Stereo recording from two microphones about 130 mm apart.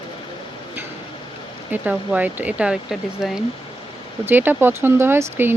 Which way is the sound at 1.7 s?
10° right (ahead or behind).